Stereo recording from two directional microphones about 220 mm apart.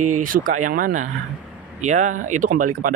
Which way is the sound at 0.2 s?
40° right (ahead or behind).